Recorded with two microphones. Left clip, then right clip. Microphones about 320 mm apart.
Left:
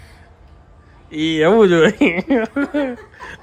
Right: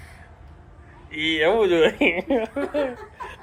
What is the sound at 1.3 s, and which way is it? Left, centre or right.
Speech, left.